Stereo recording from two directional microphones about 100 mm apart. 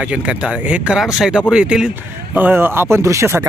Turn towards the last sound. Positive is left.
turn(degrees=-25)  # may be behind; listen again after turning